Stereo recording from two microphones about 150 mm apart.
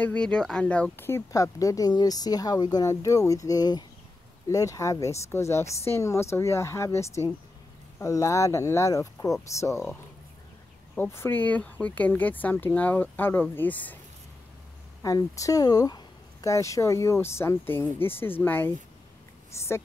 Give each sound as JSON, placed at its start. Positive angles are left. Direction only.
{"t": 0.0, "sound": "speech", "side_deg": 10}
{"t": 11.0, "sound": "speech", "side_deg": 15}
{"t": 15.0, "sound": "speech", "side_deg": 20}